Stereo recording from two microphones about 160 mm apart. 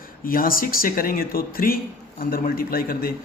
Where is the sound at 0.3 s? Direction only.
65° left (ahead or behind).